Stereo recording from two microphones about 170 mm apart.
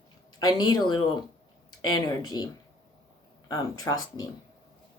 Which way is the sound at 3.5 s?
20° left (ahead or behind).